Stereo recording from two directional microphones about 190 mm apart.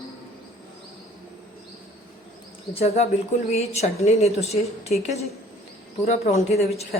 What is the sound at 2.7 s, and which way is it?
A woman's voice, 35° left (ahead or behind).